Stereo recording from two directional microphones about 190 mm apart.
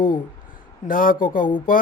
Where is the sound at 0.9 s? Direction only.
45° left (ahead or behind).